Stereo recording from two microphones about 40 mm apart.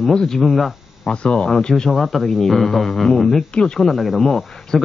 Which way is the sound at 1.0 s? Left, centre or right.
Left.